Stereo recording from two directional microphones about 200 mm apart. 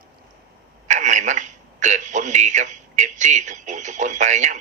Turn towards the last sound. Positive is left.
turn(degrees=-35)  # may be behind; listen again after turning